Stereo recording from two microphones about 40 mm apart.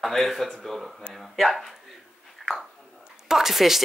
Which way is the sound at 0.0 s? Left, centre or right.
Centre.